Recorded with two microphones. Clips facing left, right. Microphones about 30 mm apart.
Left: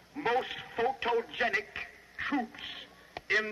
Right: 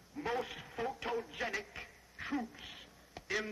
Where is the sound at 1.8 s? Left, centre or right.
Left.